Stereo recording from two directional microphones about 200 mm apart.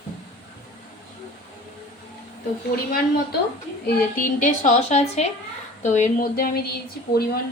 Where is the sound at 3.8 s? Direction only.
40° left (ahead or behind).